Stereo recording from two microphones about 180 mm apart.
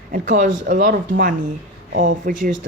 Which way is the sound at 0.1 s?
45° right (ahead or behind).